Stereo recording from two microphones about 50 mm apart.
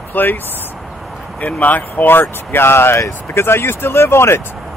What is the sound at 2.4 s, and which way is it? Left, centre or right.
Speech, left.